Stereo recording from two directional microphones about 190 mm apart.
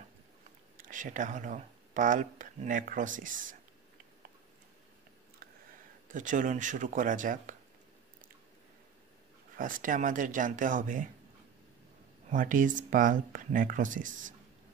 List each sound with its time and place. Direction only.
0.7 s speech: 45° right (ahead or behind)
5.4 s a sound: 55° right (ahead or behind)
6.1 s speech: 45° right (ahead or behind)
9.6 s speech: 45° right (ahead or behind)
12.3 s speech: 45° right (ahead or behind)